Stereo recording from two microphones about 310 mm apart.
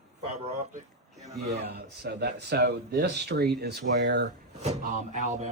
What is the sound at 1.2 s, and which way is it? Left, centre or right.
Speech, right.